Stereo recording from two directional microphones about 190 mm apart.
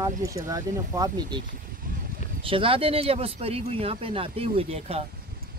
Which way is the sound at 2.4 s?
30° right (ahead or behind).